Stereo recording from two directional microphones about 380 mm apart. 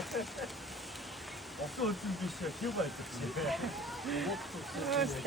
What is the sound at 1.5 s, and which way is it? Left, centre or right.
Speech, centre.